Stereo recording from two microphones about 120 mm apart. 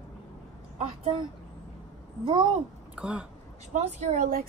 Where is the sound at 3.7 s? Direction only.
70° right (ahead or behind).